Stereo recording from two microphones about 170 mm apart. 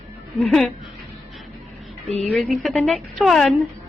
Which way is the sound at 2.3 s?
Centre (ahead or behind).